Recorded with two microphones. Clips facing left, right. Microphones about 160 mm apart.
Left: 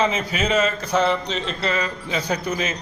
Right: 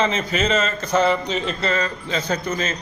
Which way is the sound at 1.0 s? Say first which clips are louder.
Right 2 dB; 5° right (ahead or behind).